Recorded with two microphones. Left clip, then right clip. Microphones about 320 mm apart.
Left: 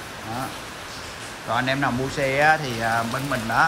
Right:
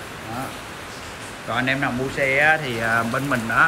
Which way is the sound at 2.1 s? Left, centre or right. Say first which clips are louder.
Right 4 dB; left.